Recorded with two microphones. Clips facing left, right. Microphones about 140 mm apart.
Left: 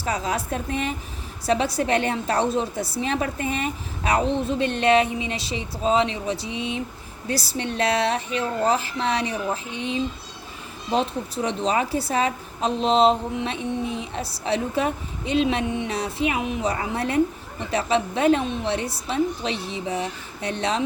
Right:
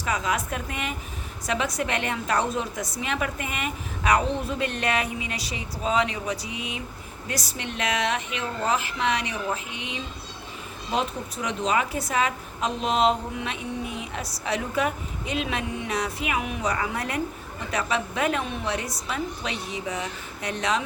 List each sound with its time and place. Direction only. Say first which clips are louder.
0.0 s a woman's voice: left 1 dB; 35° left (ahead or behind)